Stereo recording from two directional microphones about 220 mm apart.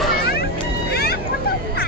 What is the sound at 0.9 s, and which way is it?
Music, 45° left (ahead or behind).